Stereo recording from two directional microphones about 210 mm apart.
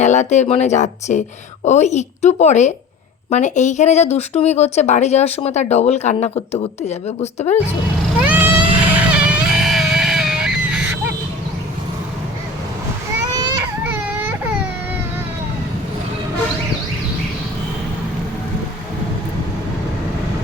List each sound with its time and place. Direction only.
0.0 s speech: 35° left (ahead or behind)
8.2 s a sound: 10° right (ahead or behind)
13.8 s baby cry: 5° right (ahead or behind)